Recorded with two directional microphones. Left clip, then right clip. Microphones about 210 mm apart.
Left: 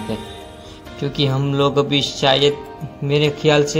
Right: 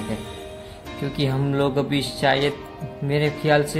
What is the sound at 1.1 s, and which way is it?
Speech, centre (ahead or behind).